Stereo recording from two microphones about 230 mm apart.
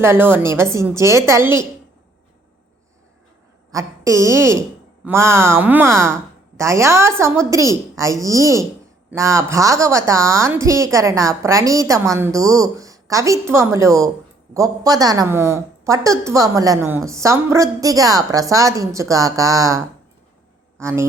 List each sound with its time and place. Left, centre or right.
0.0 s a woman's voice: centre
3.7 s a woman's voice: centre
20.8 s a woman's voice: centre